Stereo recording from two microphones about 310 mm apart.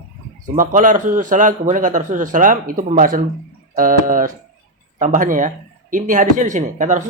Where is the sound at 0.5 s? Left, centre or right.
Right.